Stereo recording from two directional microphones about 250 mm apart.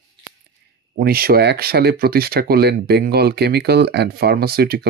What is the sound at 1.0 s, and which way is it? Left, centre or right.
Speech, right.